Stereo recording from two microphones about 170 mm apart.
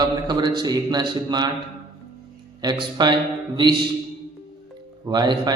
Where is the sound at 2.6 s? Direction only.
25° right (ahead or behind).